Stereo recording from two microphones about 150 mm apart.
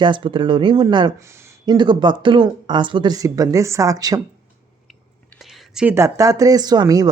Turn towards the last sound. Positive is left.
turn(degrees=-25)  # may be behind; listen again after turning